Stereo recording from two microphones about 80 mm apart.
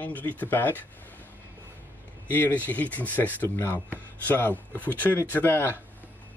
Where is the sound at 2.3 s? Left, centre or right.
Left.